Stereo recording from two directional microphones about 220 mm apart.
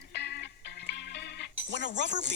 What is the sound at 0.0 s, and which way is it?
Music, 50° left (ahead or behind).